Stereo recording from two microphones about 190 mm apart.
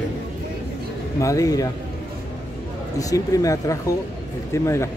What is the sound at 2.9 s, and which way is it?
Speech, 15° left (ahead or behind).